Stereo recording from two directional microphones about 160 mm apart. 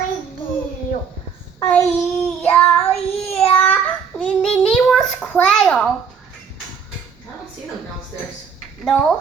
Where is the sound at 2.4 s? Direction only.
5° left (ahead or behind).